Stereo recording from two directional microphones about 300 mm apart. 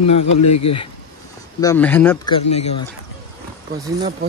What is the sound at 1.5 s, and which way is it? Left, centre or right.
Speech, centre.